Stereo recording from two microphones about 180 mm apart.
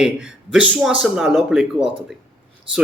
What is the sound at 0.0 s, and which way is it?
A man's voice, 5° right (ahead or behind).